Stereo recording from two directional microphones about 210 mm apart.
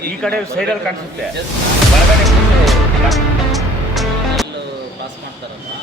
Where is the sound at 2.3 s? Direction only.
Centre (ahead or behind).